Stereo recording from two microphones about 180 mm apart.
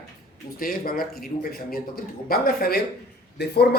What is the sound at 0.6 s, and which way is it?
Speech, 55° left (ahead or behind).